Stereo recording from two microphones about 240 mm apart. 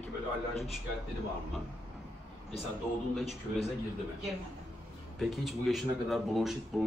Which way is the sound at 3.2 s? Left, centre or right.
Left.